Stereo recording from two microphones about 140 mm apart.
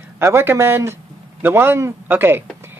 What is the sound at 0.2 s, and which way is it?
Speech, 15° right (ahead or behind).